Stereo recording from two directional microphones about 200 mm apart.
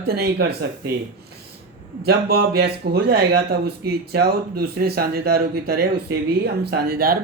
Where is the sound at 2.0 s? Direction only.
55° right (ahead or behind).